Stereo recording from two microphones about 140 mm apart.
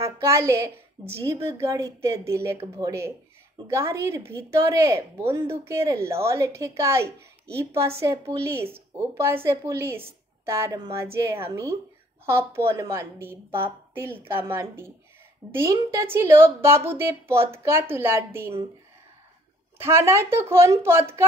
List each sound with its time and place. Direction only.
0.0 s a woman's voice: 20° right (ahead or behind)
19.8 s a woman's voice: 20° right (ahead or behind)